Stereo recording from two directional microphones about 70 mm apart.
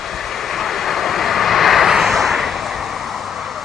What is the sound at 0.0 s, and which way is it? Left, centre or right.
Vehicle, centre.